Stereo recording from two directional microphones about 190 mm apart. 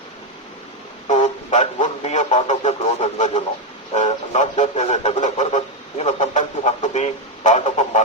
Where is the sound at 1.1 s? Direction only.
40° left (ahead or behind).